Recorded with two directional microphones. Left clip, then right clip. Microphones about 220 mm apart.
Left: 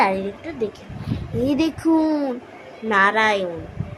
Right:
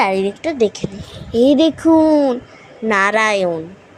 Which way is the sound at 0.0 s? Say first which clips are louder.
Right 4 dB; 35° right (ahead or behind).